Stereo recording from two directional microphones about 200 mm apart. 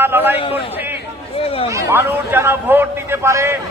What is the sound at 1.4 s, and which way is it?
Speech, 30° left (ahead or behind).